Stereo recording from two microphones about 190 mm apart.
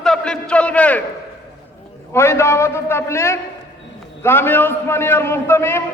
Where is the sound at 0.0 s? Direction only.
5° left (ahead or behind).